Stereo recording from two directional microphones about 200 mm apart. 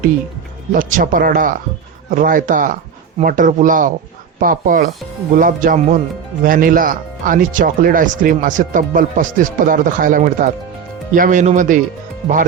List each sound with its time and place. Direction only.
0.7 s a man's voice: 40° right (ahead or behind)